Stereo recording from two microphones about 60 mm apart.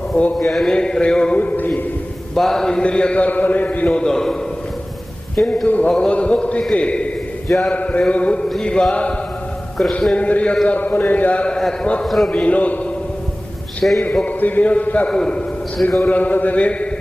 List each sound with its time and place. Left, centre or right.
0.3 s a man's voice: centre
1.4 s speech: left
2.3 s a man's voice: centre; by 3.8 s left
3.8 s a man's voice: centre
5.6 s speech: left
7.4 s speech: centre
7.7 s a man's voice: left
10.2 s a man's voice: left
12.0 s a man's voice: centre
12.3 s speech: left
13.8 s a man's voice: centre
14.3 s a man's voice: left
16.0 s speech: left